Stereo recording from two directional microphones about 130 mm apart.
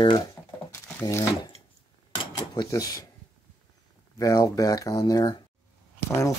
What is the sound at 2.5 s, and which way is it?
Speech, 30° left (ahead or behind).